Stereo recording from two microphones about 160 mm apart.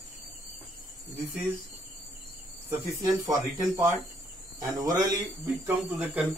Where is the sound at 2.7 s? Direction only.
20° right (ahead or behind).